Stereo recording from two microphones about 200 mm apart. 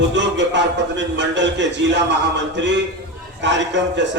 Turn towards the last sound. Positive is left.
turn(degrees=-65)  # may be behind; listen again after turning